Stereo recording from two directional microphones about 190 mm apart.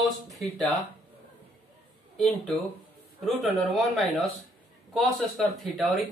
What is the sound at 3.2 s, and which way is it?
Speech, centre (ahead or behind).